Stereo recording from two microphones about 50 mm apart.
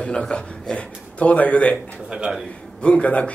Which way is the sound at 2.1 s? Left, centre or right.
Centre.